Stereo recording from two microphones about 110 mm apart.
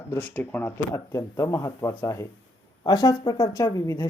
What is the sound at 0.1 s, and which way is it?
Speech, 15° left (ahead or behind).